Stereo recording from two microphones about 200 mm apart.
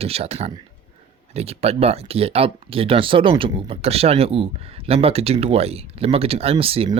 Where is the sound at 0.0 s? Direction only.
30° right (ahead or behind).